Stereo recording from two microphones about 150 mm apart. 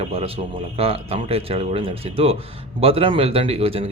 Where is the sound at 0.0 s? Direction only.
40° right (ahead or behind).